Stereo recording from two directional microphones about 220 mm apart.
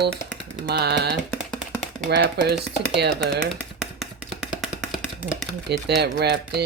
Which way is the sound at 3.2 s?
Centre (ahead or behind).